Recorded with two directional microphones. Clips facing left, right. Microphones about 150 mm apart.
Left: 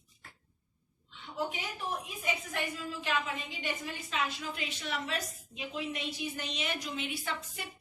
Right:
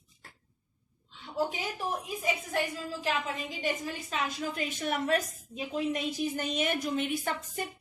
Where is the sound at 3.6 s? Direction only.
40° right (ahead or behind).